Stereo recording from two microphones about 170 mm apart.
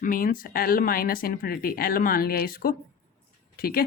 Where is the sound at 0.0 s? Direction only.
55° left (ahead or behind).